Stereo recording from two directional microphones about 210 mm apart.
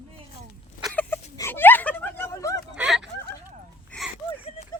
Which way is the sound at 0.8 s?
10° left (ahead or behind).